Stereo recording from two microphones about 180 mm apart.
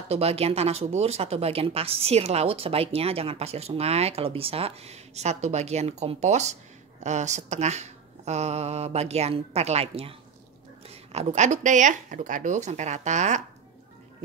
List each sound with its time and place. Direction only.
0.1 s speech: 35° right (ahead or behind)